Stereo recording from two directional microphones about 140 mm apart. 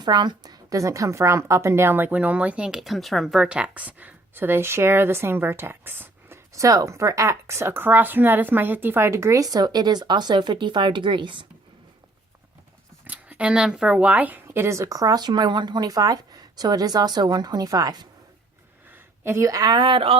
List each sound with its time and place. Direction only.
0.0 s a woman's voice: 30° right (ahead or behind)
13.1 s speech: 10° right (ahead or behind); by 18.1 s 30° right (ahead or behind)
18.9 s speech: 15° right (ahead or behind); by 20.1 s 40° right (ahead or behind)